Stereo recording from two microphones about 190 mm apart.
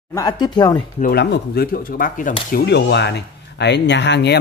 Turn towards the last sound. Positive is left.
turn(degrees=65)  # may be behind; listen again after turning